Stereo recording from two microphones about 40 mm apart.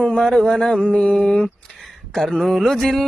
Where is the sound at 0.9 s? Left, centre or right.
Left.